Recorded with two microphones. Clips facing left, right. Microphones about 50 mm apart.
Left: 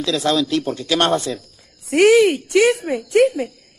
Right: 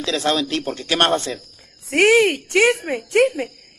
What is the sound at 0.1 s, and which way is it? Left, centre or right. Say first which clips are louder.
Speech: even; centre.